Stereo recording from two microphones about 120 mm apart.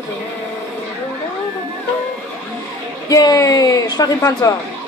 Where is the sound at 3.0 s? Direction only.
30° left (ahead or behind).